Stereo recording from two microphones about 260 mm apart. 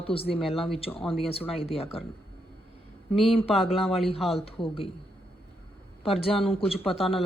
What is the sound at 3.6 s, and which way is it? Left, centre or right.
Speech, left.